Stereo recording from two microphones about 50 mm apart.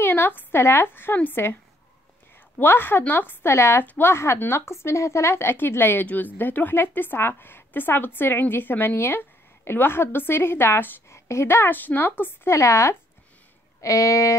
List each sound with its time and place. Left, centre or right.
0.0 s a woman's voice: left
2.6 s a woman's voice: left
3.5 s speech: left
3.8 s speech: left
4.1 s a woman's voice: left
8.9 s a woman's voice: left
11.1 s a woman's voice: left
11.7 s speech: left
12.4 s speech: left
13.7 s speech: left